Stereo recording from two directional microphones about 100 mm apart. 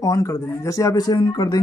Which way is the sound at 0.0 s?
35° left (ahead or behind).